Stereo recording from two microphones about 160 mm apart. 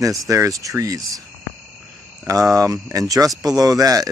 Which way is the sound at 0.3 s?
20° right (ahead or behind).